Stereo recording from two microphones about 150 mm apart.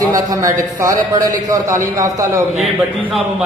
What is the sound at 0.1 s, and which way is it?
A man's voice, 25° right (ahead or behind).